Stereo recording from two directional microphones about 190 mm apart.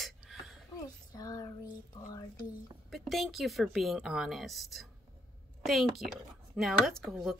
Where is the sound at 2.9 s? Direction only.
Centre (ahead or behind).